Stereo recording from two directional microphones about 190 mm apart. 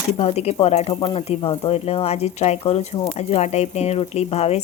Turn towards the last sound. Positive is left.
turn(degrees=35)  # may be behind; listen again after turning